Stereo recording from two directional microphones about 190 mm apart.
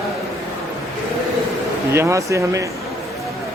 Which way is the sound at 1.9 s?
15° right (ahead or behind).